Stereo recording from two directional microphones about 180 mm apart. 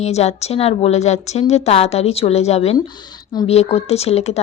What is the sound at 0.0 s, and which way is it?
A woman's voice, 35° left (ahead or behind).